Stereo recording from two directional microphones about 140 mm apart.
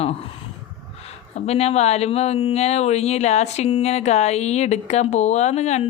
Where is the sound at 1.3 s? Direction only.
50° left (ahead or behind).